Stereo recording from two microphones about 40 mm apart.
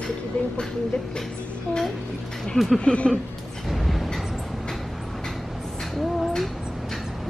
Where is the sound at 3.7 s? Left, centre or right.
Centre.